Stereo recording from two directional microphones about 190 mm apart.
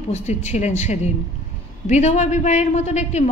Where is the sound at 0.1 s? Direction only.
35° left (ahead or behind).